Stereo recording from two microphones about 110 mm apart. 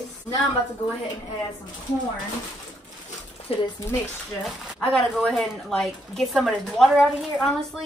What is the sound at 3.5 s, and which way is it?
Speech, 55° left (ahead or behind).